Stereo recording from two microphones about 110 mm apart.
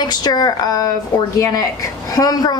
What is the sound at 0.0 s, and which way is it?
A woman's voice, 40° left (ahead or behind).